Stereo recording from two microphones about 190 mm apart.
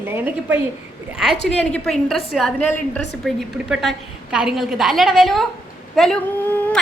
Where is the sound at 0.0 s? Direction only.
10° right (ahead or behind).